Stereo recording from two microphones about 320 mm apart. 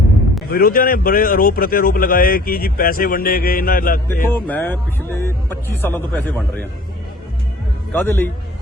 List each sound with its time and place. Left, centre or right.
0.5 s a man's voice: left
4.4 s a man's voice: centre
7.9 s a man's voice: centre